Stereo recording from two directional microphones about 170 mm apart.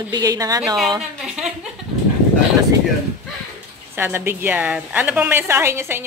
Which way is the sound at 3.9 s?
15° right (ahead or behind).